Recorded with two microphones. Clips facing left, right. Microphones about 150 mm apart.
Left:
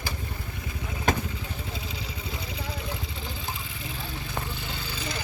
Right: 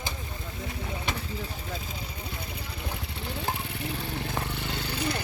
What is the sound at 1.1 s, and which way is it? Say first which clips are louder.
Vehicle: left 10 dB; 45° left (ahead or behind).